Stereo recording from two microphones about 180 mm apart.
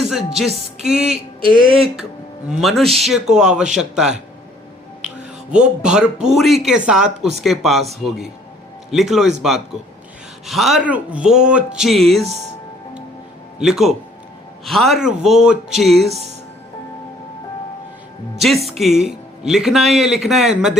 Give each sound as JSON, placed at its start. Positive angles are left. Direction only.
{"t": 0.1, "sound": "speech", "side_deg": -5}
{"t": 1.6, "sound": "speech", "side_deg": -30}
{"t": 2.5, "sound": "speech", "side_deg": 0}
{"t": 8.9, "sound": "speech", "side_deg": 0}
{"t": 13.6, "sound": "speech", "side_deg": 0}
{"t": 18.3, "sound": "speech", "side_deg": 0}